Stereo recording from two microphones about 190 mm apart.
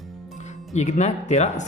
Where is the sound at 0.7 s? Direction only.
35° left (ahead or behind).